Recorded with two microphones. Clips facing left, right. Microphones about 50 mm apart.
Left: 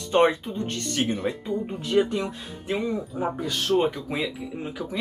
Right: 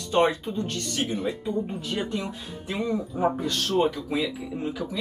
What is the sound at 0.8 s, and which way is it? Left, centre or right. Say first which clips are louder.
Speech: left 2 dB; left.